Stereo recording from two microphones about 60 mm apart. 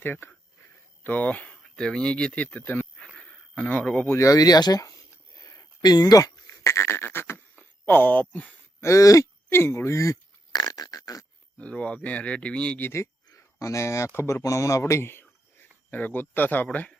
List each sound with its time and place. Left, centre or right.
0.0 s speech: left
1.6 s speech: centre; by 2.8 s left
3.8 s speech: left
4.2 s speech: left
5.4 s a sound: left
6.7 s beatboxing: left
7.5 s speech: left
8.8 s a sound: left
9.5 s speech: left
9.9 s a sound: left
11.5 s speech: left
13.2 s speech: left
14.4 s speech: left